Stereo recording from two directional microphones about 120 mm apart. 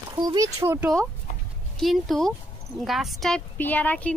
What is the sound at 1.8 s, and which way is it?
Speech, centre (ahead or behind).